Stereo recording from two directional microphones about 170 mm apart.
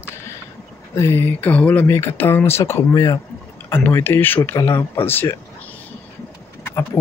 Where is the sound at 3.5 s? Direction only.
10° left (ahead or behind).